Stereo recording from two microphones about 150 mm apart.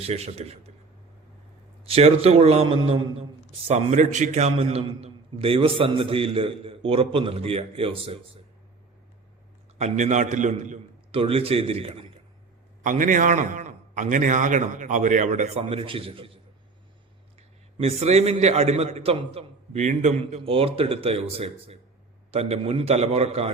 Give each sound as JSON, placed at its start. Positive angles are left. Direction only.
{"t": 0.0, "sound": "a man's voice", "side_deg": -45}
{"t": 1.8, "sound": "a man's voice", "side_deg": -40}
{"t": 3.7, "sound": "a man's voice", "side_deg": -50}
{"t": 9.7, "sound": "a man's voice", "side_deg": -50}
{"t": 11.1, "sound": "a man's voice", "side_deg": -40}
{"t": 12.8, "sound": "a man's voice", "side_deg": -60}
{"t": 17.7, "sound": "a man's voice", "side_deg": -45}